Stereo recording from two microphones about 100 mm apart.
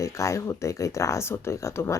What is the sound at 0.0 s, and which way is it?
Speech, 30° left (ahead or behind).